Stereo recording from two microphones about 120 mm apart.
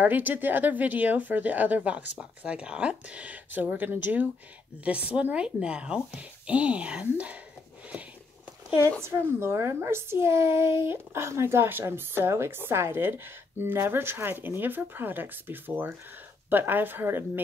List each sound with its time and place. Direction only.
0.0 s speech: 15° right (ahead or behind)
9.0 s a child's voice: 20° right (ahead or behind)